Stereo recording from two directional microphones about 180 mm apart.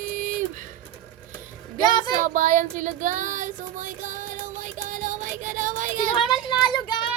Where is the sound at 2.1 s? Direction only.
45° right (ahead or behind).